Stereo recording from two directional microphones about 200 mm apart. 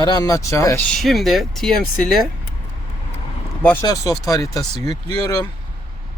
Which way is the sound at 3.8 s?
15° left (ahead or behind).